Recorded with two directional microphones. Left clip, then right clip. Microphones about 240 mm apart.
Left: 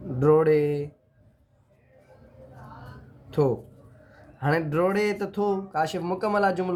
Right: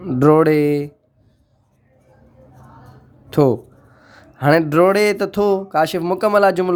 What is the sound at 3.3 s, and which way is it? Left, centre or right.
A man's voice, right.